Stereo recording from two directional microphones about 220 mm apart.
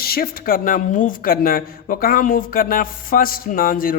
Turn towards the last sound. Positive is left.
turn(degrees=40)  # may be behind; listen again after turning